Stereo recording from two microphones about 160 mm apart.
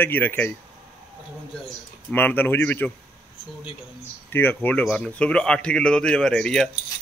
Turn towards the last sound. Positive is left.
turn(degrees=5)  # may be behind; listen again after turning